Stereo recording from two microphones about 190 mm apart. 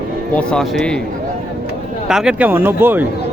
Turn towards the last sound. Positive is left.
turn(degrees=-10)  # may be behind; listen again after turning